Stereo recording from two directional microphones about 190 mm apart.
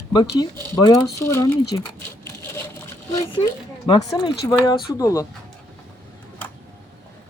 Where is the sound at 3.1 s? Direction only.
25° left (ahead or behind).